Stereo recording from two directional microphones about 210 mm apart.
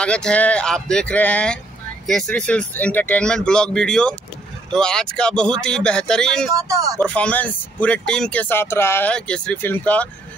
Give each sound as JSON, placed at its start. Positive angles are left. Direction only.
{"t": 0.0, "sound": "speech", "side_deg": 5}
{"t": 6.5, "sound": "speech", "side_deg": -15}
{"t": 7.0, "sound": "speech", "side_deg": 5}